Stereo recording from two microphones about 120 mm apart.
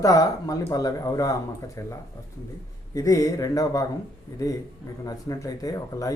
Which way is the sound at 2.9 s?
30° left (ahead or behind).